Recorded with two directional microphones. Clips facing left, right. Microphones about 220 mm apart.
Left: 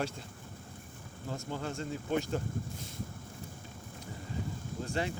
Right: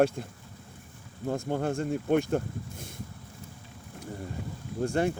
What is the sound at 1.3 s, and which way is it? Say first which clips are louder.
Speech: right 9 dB; 55° right (ahead or behind).